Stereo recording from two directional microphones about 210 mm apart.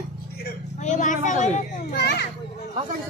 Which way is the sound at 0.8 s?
35° left (ahead or behind).